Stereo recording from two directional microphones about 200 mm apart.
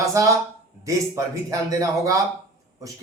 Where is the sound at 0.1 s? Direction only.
15° right (ahead or behind).